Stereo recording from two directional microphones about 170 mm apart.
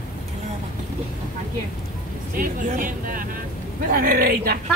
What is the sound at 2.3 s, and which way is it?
Speech, 50° right (ahead or behind).